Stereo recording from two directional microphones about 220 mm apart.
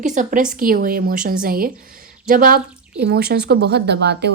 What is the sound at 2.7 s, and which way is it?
Drip, 5° right (ahead or behind).